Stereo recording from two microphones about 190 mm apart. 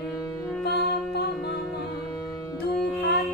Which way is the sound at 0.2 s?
15° left (ahead or behind).